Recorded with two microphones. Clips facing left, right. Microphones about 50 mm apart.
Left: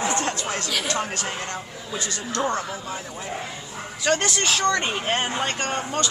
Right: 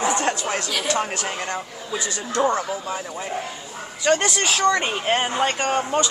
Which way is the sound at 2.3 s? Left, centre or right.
Right.